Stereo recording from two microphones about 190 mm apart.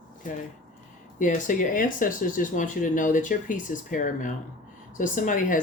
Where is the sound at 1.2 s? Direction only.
45° left (ahead or behind).